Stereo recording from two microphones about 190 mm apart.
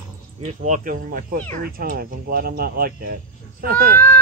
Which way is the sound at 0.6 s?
40° right (ahead or behind).